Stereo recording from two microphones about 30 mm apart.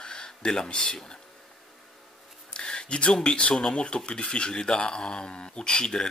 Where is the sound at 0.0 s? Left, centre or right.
Left.